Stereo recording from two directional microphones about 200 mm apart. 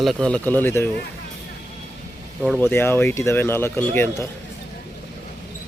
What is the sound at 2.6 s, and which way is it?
A man's voice, 10° left (ahead or behind).